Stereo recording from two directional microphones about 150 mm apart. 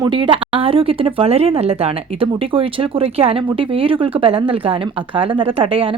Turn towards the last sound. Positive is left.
turn(degrees=-35)  # may be behind; listen again after turning